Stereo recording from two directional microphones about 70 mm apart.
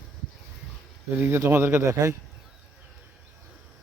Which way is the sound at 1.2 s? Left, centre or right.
Right.